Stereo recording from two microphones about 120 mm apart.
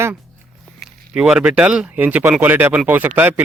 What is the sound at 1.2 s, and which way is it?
A man's voice, 5° right (ahead or behind).